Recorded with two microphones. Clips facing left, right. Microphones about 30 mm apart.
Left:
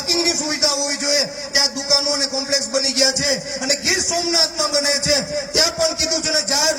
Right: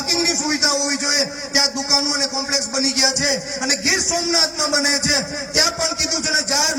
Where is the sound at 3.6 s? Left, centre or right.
Centre.